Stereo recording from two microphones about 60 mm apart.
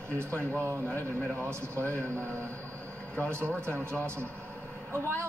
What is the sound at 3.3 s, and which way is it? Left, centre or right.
Speech, right.